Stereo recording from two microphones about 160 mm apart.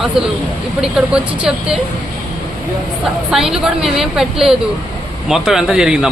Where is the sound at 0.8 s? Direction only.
5° right (ahead or behind).